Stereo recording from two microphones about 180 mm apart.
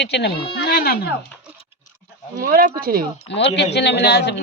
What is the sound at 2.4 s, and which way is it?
Speech, 50° right (ahead or behind).